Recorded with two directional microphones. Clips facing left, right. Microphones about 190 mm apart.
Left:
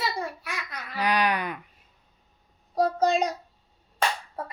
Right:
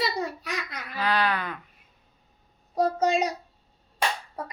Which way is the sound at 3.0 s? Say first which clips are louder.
Left 1 dB; 10° right (ahead or behind).